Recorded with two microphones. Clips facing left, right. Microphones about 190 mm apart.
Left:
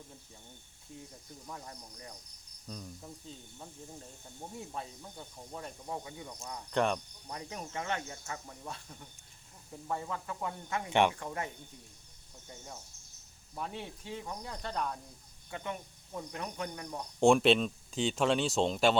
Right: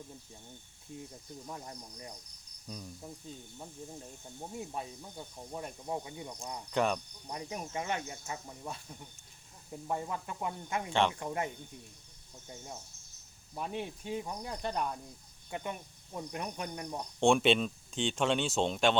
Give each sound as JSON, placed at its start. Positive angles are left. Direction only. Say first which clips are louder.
{"t": 1.5, "sound": "cricket", "louder": "right 1 dB", "side_deg": -20}
{"t": 2.6, "sound": "speech", "louder": "even", "side_deg": -5}
{"t": 4.7, "sound": "speech", "louder": "right 2 dB", "side_deg": -15}
{"t": 6.7, "sound": "speech", "louder": "even", "side_deg": -5}
{"t": 7.3, "sound": "speech", "louder": "right 2 dB", "side_deg": -15}
{"t": 9.8, "sound": "speech", "louder": "right 1 dB", "side_deg": -20}
{"t": 10.8, "sound": "speech", "louder": "left 3 dB", "side_deg": 15}
{"t": 11.2, "sound": "cricket", "louder": "right 3 dB", "side_deg": -20}
{"t": 13.6, "sound": "speech", "louder": "right 3 dB", "side_deg": -20}
{"t": 16.3, "sound": "cricket", "louder": "right 1 dB", "side_deg": -20}
{"t": 17.2, "sound": "speech", "louder": "left 2 dB", "side_deg": 0}